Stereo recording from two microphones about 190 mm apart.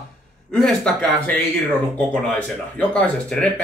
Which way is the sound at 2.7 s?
5° left (ahead or behind).